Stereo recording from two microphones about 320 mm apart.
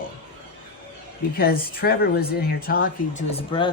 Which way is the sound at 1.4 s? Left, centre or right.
Left.